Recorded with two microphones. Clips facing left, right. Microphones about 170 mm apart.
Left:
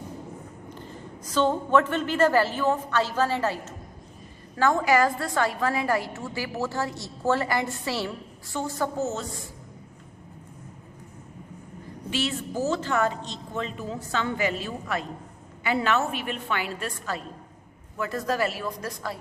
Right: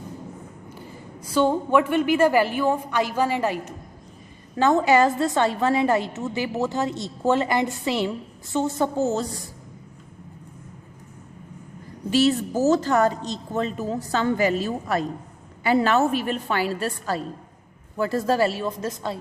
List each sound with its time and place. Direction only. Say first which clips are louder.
0.7 s a woman's voice: left 1 dB; 10° right (ahead or behind); by 9.4 s 35° right (ahead or behind)
12.1 s a woman's voice: right 9 dB; 40° right (ahead or behind)